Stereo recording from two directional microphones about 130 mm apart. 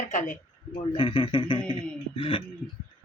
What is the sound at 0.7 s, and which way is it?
A man's voice, 40° left (ahead or behind).